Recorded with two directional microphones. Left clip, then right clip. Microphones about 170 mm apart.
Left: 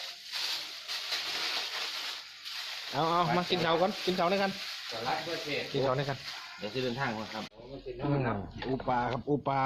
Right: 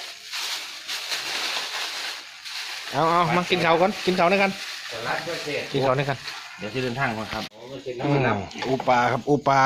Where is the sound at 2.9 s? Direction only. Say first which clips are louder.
Right 8 dB; 5° right (ahead or behind).